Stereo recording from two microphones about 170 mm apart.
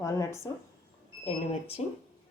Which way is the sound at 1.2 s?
35° left (ahead or behind).